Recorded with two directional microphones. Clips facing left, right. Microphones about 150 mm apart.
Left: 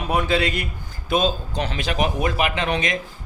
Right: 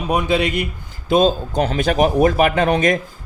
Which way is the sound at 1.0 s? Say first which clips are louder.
Right 6 dB; 35° right (ahead or behind).